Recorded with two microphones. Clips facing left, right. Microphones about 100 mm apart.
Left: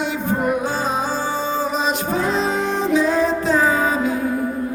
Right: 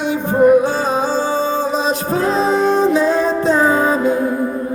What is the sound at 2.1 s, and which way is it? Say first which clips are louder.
Music: right 7 dB; 35° right (ahead or behind).